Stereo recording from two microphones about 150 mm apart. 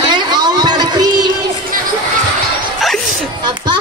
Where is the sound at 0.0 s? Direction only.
30° right (ahead or behind).